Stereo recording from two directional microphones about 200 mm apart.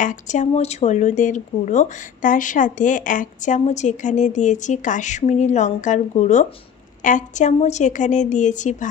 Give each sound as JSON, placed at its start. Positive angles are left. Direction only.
{"t": 0.0, "sound": "speech", "side_deg": 40}